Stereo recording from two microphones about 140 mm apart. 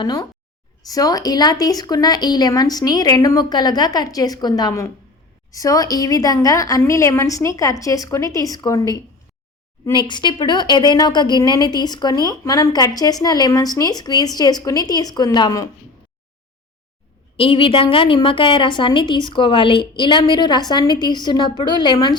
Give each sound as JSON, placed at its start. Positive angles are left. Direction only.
{"t": 0.0, "sound": "a woman's voice", "side_deg": 30}
{"t": 10.1, "sound": "a woman's voice", "side_deg": 30}
{"t": 17.3, "sound": "a woman's voice", "side_deg": 40}